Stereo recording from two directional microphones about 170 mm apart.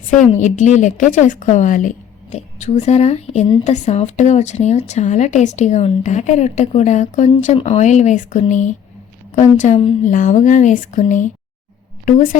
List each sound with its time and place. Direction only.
0.3 s a woman's voice: 45° left (ahead or behind)